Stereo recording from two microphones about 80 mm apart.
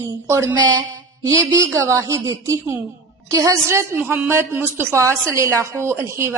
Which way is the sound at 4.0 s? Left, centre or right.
Centre.